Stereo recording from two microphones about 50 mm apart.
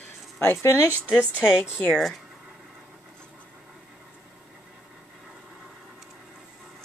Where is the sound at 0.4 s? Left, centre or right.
Left.